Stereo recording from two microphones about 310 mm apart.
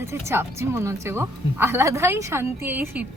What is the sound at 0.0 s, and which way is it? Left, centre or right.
A woman's voice, centre.